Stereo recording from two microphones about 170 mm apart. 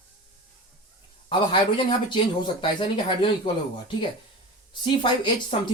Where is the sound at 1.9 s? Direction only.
30° left (ahead or behind).